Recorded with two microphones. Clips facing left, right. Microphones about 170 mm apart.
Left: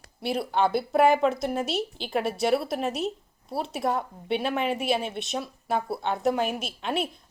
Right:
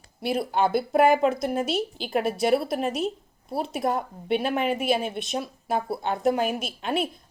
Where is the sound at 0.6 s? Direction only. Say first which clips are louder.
Right 1 dB; 50° right (ahead or behind).